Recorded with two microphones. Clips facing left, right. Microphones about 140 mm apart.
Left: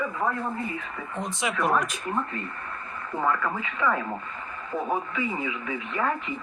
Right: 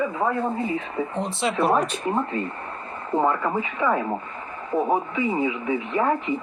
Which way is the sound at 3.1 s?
25° right (ahead or behind).